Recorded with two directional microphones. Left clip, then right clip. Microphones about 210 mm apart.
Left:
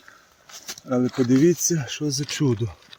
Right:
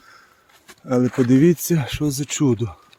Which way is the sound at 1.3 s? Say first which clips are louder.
Right 1 dB; 45° right (ahead or behind).